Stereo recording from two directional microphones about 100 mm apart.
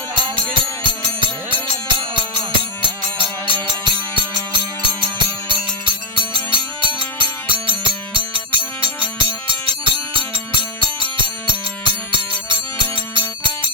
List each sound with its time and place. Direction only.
0.1 s music: 50° right (ahead or behind)
5.0 s music: 55° right (ahead or behind)